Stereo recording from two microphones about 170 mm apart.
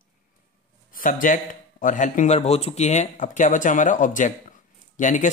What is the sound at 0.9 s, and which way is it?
Speech, 50° left (ahead or behind).